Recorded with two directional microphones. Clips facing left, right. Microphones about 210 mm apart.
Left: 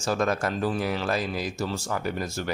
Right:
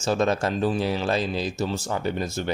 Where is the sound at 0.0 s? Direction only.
25° right (ahead or behind).